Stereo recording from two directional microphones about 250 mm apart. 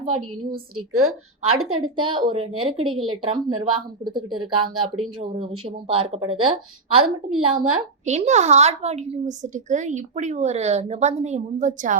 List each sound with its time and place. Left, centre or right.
0.8 s speech: right
2.0 s a woman's voice: centre
7.0 s speech: right
8.0 s a woman's voice: right